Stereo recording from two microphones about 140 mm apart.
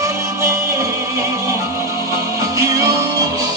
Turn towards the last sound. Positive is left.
turn(degrees=-25)  # may be behind; listen again after turning